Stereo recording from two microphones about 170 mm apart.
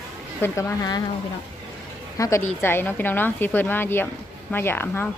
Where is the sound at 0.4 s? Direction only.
15° left (ahead or behind).